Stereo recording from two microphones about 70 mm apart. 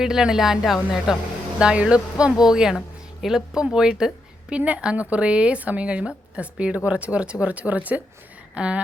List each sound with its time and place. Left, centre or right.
0.0 s a woman's voice: centre
1.5 s a woman's voice: centre